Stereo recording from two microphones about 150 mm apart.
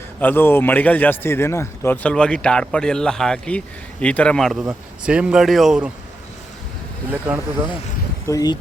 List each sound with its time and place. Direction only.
0.2 s a man's voice: 15° left (ahead or behind); by 5.9 s 5° right (ahead or behind)
7.3 s speech: 15° right (ahead or behind)
8.3 s speech: 25° left (ahead or behind)